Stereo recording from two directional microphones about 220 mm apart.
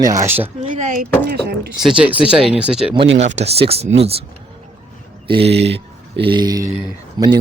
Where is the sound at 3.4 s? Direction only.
25° right (ahead or behind).